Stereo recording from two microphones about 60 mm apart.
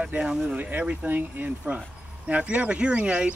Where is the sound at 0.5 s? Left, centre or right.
Right.